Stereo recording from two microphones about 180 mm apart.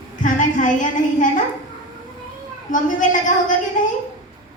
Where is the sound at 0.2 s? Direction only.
45° left (ahead or behind).